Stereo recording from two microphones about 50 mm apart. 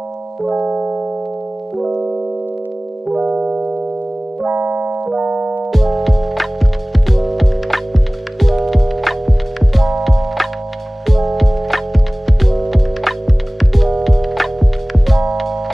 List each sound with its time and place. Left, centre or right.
0.4 s piano: centre
0.7 s music: centre
3.3 s music: right
4.5 s keyboard: right
5.1 s music: right
5.7 s music: centre